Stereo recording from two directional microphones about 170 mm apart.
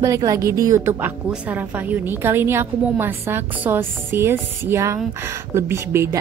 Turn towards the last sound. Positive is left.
turn(degrees=-15)  # may be behind; listen again after turning